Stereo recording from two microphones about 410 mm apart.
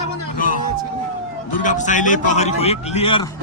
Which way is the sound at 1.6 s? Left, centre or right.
Centre.